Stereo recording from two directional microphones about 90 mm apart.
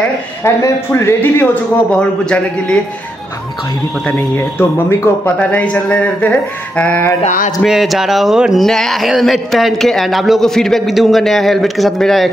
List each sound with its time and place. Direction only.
0.4 s speech: 30° left (ahead or behind)
1.5 s speech: 10° left (ahead or behind)
5.2 s speech: 15° left (ahead or behind)
7.6 s a man's voice: 5° right (ahead or behind)